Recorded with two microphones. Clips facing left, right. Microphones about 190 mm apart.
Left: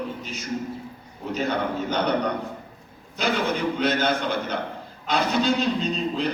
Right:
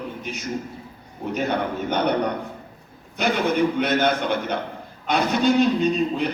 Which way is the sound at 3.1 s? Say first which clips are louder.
Right 3 dB; 60° right (ahead or behind).